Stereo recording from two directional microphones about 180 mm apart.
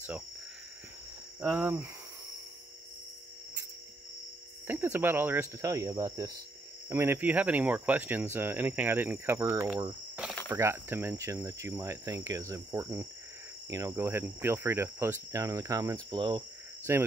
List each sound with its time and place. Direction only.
1.4 s speech: 10° right (ahead or behind)
4.6 s speech: 15° right (ahead or behind)